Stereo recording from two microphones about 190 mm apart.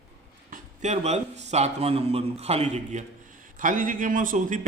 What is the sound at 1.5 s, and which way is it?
Speech, 35° right (ahead or behind).